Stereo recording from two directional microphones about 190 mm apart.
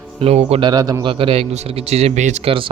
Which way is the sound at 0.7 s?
20° right (ahead or behind).